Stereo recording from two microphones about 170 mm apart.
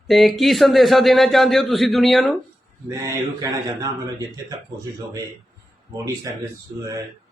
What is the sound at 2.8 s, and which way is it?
Speech, 20° right (ahead or behind).